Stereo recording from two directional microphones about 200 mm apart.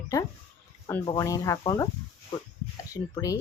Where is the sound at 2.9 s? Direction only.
15° left (ahead or behind).